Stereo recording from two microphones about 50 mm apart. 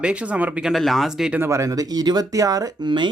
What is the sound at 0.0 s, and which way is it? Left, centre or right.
Speech, right.